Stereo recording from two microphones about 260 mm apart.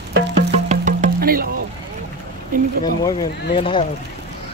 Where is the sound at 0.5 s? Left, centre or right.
Right.